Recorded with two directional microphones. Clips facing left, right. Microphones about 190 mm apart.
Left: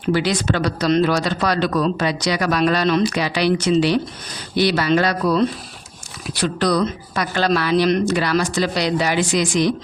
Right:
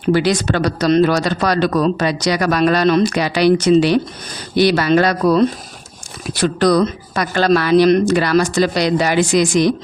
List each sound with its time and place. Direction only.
0.1 s a man's voice: 45° right (ahead or behind)